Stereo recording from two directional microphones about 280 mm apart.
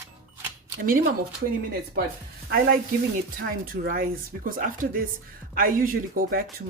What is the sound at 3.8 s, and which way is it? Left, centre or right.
Speech, right.